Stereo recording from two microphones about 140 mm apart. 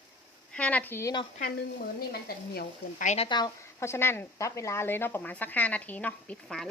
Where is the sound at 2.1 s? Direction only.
80° left.